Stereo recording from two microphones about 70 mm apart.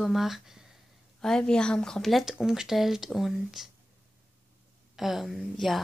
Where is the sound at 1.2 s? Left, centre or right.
Centre.